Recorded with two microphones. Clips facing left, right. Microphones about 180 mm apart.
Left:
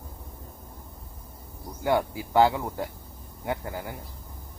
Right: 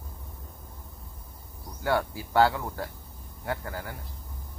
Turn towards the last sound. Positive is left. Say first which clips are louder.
# left 2 dB
turn(degrees=15)  # may be behind; listen again after turning